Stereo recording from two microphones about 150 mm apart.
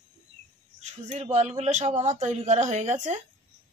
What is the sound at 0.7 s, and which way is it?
Speech, 50° right (ahead or behind).